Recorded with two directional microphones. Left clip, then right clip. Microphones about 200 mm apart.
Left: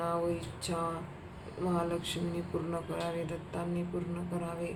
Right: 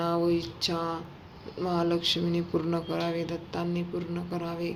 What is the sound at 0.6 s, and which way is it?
Speech, 45° right (ahead or behind).